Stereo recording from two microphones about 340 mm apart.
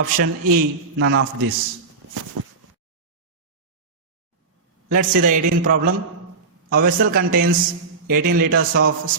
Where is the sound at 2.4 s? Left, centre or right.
Right.